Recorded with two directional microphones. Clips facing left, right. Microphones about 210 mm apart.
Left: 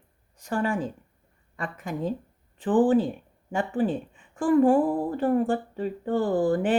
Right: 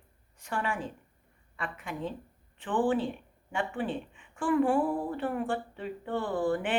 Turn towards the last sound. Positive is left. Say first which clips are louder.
# left 6 dB
turn(degrees=40)  # may be behind; listen again after turning